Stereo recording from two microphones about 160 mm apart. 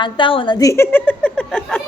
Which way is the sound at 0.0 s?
30° left (ahead or behind).